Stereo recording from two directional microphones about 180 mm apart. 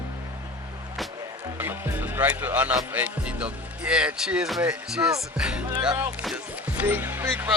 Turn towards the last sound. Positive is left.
turn(degrees=-10)  # may be behind; listen again after turning